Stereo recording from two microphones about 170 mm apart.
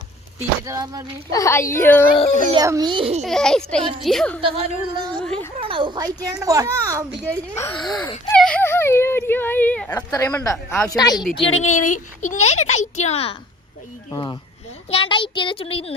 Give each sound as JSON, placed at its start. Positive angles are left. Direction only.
{"t": 0.3, "sound": "a child's voice", "side_deg": -20}
{"t": 1.3, "sound": "a woman's voice", "side_deg": 20}
{"t": 2.6, "sound": "a child's voice", "side_deg": -20}
{"t": 3.2, "sound": "a child's voice", "side_deg": 5}
{"t": 4.4, "sound": "speech", "side_deg": -35}
{"t": 5.2, "sound": "a sound", "side_deg": 5}
{"t": 5.5, "sound": "a sound", "side_deg": -30}
{"t": 6.1, "sound": "a child's voice", "side_deg": -20}
{"t": 7.3, "sound": "a woman's voice", "side_deg": 15}
{"t": 7.8, "sound": "a child's voice", "side_deg": 0}
{"t": 8.4, "sound": "whimper", "side_deg": 5}
{"t": 10.2, "sound": "a woman's voice", "side_deg": 15}
{"t": 11.3, "sound": "a child's voice", "side_deg": 35}
{"t": 14.1, "sound": "a child's voice", "side_deg": 25}